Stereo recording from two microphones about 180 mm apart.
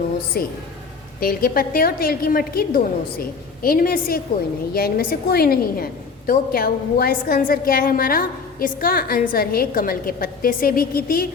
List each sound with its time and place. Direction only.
0.4 s a woman's voice: 55° left (ahead or behind)